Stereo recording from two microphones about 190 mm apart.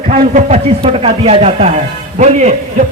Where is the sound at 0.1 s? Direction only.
40° right (ahead or behind).